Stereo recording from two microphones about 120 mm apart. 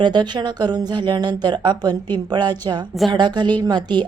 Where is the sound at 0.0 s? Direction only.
40° right (ahead or behind).